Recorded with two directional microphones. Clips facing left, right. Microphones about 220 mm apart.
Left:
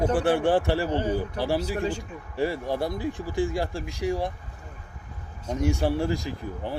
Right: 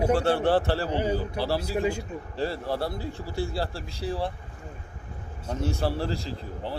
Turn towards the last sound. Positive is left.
turn(degrees=15)  # may be behind; listen again after turning